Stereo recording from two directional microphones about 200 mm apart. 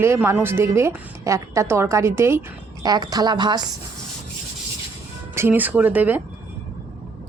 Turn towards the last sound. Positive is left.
turn(degrees=-10)  # may be behind; listen again after turning